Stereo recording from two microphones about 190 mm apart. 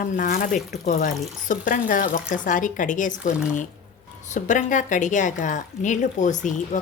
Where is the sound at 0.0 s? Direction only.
45° left (ahead or behind).